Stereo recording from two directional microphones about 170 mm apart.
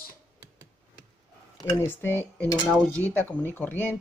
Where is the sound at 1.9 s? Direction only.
10° left (ahead or behind).